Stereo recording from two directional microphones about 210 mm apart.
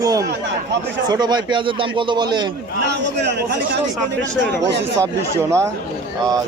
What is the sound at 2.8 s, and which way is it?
Speech, 55° right (ahead or behind).